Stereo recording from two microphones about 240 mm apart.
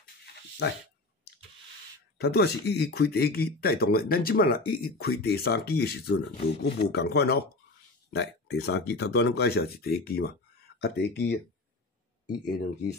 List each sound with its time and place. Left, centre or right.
2.1 s speech: left